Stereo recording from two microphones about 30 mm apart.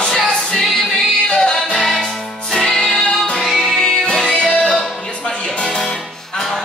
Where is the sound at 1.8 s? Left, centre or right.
Centre.